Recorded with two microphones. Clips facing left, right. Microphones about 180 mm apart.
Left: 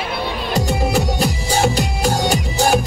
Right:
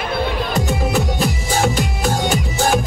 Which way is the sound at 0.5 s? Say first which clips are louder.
Left 3 dB; 35° left (ahead or behind).